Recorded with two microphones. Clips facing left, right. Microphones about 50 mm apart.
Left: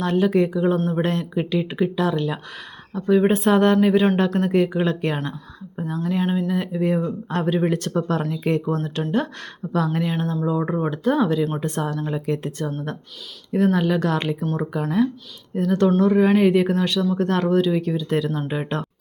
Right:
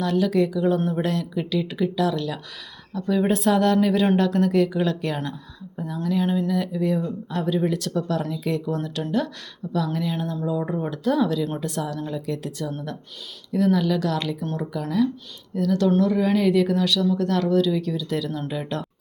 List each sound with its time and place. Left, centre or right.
0.0 s speech: left
6.5 s speech: left